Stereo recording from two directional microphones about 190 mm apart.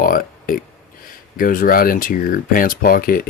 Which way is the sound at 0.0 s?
50° left (ahead or behind).